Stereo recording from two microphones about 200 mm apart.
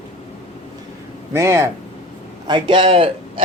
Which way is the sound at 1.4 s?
15° right (ahead or behind).